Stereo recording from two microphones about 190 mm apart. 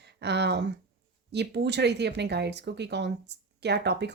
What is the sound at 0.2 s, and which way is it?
Speech, 60° right (ahead or behind).